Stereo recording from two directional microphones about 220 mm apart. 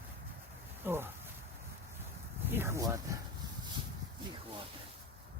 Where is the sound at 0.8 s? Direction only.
10° right (ahead or behind).